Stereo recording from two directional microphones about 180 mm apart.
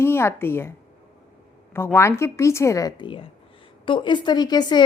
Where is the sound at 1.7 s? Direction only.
15° left (ahead or behind).